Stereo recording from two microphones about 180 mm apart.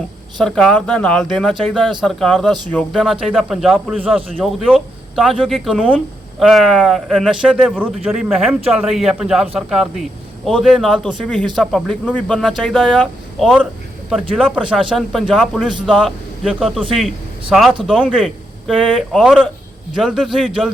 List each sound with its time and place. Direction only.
0.3 s speech: 5° left (ahead or behind)